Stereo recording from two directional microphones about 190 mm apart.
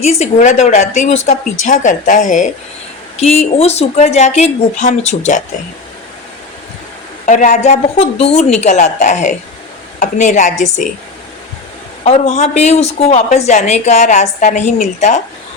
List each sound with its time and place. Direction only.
0.0 s a woman's voice: 35° left (ahead or behind)
3.6 s a woman's voice: 35° left (ahead or behind)
7.3 s a woman's voice: 40° left (ahead or behind)
12.0 s a woman's voice: 35° left (ahead or behind)